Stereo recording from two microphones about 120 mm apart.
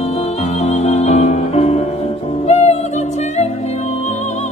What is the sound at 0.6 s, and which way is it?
Music, 70° left (ahead or behind).